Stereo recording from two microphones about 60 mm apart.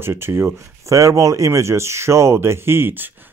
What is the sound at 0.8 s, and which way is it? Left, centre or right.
Speech, right.